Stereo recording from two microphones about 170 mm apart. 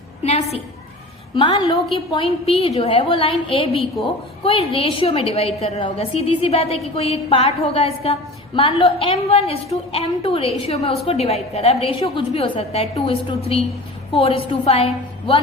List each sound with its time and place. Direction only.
0.2 s a woman's voice: 40° left (ahead or behind)